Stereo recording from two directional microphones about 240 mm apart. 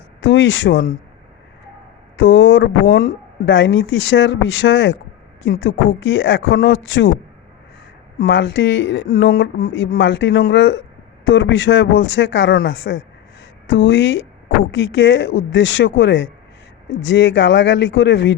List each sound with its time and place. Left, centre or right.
0.2 s speech: left
2.1 s speech: left
8.2 s speech: left